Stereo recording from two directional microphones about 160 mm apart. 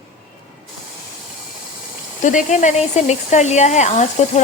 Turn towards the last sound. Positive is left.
turn(degrees=45)  # may be behind; listen again after turning